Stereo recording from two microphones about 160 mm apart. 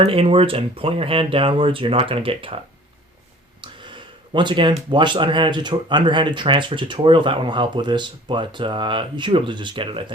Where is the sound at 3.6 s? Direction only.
30° right (ahead or behind).